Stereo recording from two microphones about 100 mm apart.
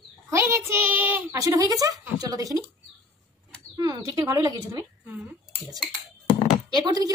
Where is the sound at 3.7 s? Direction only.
40° right (ahead or behind).